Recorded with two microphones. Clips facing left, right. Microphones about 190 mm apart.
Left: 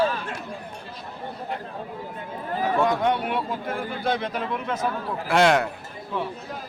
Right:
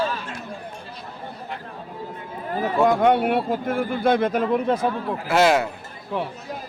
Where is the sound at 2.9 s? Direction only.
55° right (ahead or behind).